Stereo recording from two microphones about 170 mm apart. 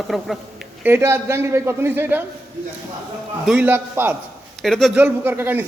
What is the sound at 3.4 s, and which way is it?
Speech, 5° right (ahead or behind).